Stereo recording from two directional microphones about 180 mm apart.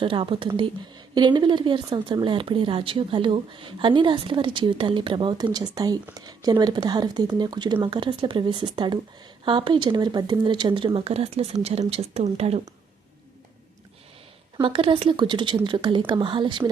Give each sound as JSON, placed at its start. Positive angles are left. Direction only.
{"t": 0.0, "sound": "speech", "side_deg": -30}
{"t": 14.6, "sound": "speech", "side_deg": -30}